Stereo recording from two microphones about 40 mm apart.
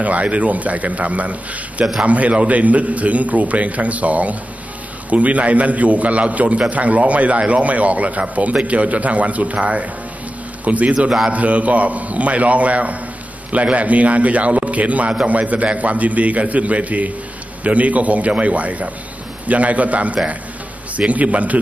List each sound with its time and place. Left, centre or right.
0.0 s a man's voice: right
11.0 s a man's voice: centre
11.3 s a man's voice: right